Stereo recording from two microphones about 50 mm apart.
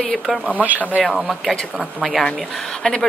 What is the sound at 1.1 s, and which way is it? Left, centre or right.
A woman's voice, centre.